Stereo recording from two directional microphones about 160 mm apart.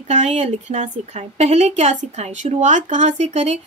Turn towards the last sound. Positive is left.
turn(degrees=-45)  # may be behind; listen again after turning